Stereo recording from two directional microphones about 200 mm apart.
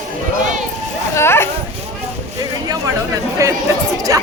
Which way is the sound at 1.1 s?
10° left (ahead or behind).